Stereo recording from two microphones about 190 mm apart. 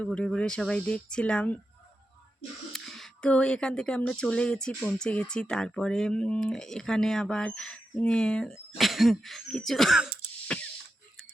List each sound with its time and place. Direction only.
0.0 s speech: 5° left (ahead or behind)
2.7 s speech: centre (ahead or behind)
10.5 s mechanisms: 5° left (ahead or behind)